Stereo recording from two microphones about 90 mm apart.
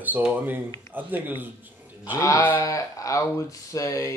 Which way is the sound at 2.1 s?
35° left (ahead or behind).